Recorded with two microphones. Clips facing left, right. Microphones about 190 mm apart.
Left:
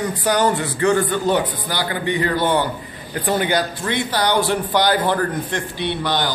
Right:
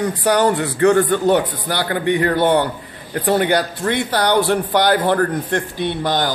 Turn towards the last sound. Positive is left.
turn(degrees=-45)  # may be behind; listen again after turning